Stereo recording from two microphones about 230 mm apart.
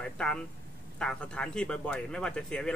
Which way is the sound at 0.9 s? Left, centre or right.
Centre.